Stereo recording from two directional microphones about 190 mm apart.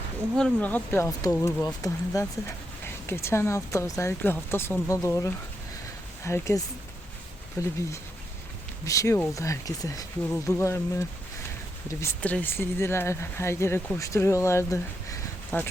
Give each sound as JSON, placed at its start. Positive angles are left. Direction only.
{"t": 0.3, "sound": "speech", "side_deg": 5}
{"t": 8.8, "sound": "speech", "side_deg": 15}